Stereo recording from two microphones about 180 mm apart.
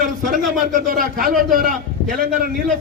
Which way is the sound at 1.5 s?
50° right (ahead or behind).